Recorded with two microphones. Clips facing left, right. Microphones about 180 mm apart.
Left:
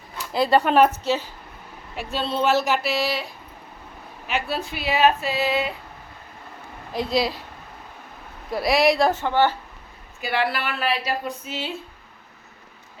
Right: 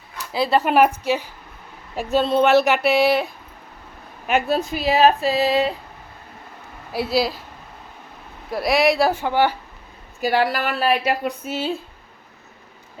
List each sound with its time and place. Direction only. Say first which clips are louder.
0.3 s a woman's voice: even; 5° right (ahead or behind)
2.0 s speech: right 7 dB; 45° right (ahead or behind)
4.3 s speech: right 7 dB; 45° right (ahead or behind)
6.9 s speech: right 2 dB; 5° right (ahead or behind)
8.4 s speech: right 1 dB; centre (ahead or behind)
10.2 s speech: right 5 dB; 40° right (ahead or behind)